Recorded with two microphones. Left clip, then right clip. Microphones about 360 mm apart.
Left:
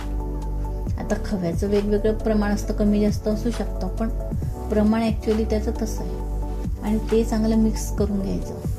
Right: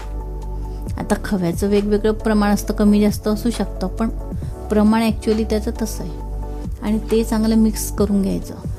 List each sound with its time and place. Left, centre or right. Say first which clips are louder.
0.9 s a woman's voice: right 6 dB; right